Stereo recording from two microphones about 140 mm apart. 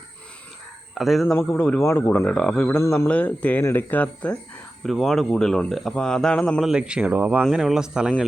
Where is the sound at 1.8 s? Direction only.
20° left (ahead or behind).